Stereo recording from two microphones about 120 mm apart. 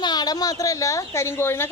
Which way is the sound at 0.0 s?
35° left (ahead or behind).